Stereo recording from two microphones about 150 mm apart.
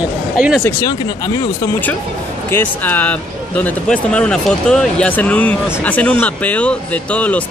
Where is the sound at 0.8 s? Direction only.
25° left (ahead or behind).